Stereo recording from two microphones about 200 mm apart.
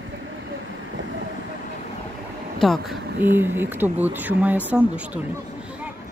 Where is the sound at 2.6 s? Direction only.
Centre (ahead or behind).